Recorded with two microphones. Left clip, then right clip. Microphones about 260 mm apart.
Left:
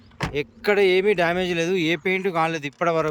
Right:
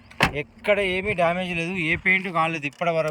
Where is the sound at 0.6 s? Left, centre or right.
Centre.